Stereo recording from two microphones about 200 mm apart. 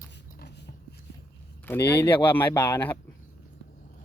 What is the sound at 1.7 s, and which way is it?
Speech, 10° left (ahead or behind).